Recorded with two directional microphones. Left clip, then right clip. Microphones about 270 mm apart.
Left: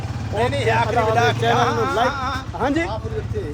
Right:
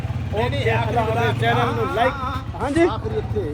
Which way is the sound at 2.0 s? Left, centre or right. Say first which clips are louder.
Left 1 dB; left.